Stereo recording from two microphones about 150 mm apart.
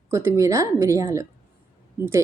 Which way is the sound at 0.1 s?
20° right (ahead or behind).